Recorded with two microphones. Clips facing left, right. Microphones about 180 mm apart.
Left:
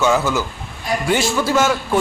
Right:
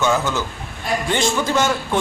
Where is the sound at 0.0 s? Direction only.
10° left (ahead or behind).